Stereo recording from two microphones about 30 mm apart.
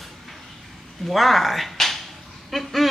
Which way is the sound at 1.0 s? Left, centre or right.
Centre.